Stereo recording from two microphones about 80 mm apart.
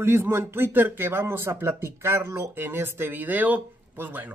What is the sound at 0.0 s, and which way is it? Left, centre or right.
Speech, right.